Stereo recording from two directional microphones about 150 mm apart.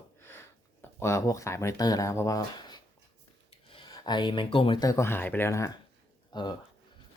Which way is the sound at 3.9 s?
30° left (ahead or behind).